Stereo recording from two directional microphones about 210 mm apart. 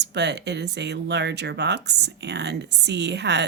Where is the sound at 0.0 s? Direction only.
55° right (ahead or behind).